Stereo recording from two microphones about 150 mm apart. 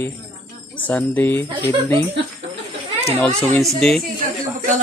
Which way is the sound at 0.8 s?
10° left (ahead or behind).